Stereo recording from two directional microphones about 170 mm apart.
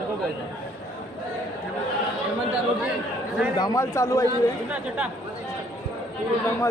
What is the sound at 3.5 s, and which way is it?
Speech, 20° left (ahead or behind).